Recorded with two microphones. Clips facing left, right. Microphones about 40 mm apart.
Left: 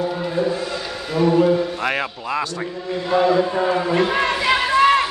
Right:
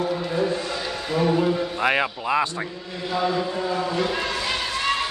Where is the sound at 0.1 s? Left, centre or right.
Centre.